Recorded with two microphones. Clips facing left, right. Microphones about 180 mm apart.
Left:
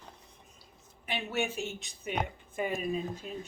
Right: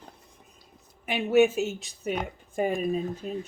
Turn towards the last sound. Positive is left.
turn(degrees=-40)  # may be behind; listen again after turning